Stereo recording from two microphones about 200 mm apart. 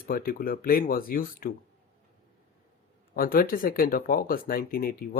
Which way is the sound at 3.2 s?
45° left (ahead or behind).